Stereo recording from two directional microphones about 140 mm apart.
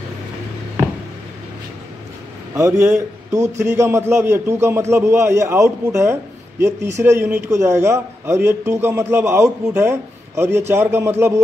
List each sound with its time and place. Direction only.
2.5 s a man's voice: 20° right (ahead or behind)